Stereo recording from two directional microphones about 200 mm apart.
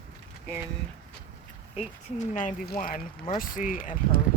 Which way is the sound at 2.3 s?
40° left (ahead or behind).